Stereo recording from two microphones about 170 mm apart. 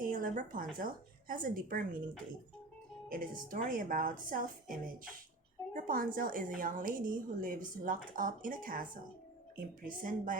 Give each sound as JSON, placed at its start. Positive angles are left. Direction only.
{"t": 0.0, "sound": "a sound", "side_deg": -55}
{"t": 0.8, "sound": "speech", "side_deg": -55}
{"t": 3.1, "sound": "a woman's voice", "side_deg": -55}